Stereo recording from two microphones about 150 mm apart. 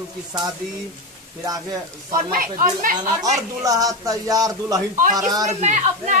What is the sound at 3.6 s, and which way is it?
Speech, 25° right (ahead or behind).